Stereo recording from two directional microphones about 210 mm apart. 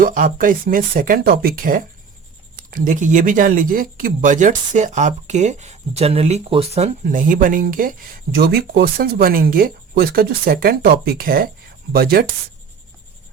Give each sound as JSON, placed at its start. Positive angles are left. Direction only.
{"t": 0.0, "sound": "speech", "side_deg": -40}